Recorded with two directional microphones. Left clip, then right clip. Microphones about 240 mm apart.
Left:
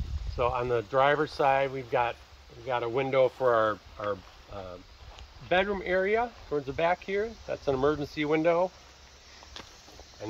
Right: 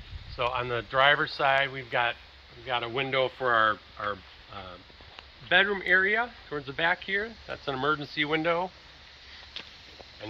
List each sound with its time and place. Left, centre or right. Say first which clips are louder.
0.4 s speech: left 2 dB; left
5.5 s speech: right 4 dB; left